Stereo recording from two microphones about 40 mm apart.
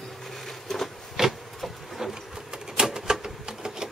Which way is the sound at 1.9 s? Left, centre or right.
Centre.